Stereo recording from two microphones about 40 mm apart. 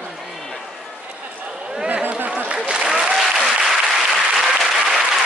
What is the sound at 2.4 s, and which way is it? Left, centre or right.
Applause, right.